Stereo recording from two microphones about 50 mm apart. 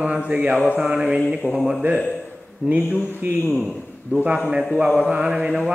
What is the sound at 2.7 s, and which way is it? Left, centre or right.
Speech, right.